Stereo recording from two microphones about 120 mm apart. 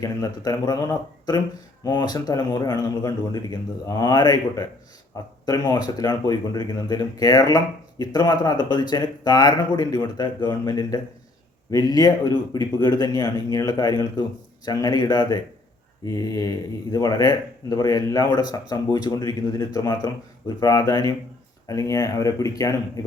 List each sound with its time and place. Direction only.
0.0 s speech: 30° left (ahead or behind)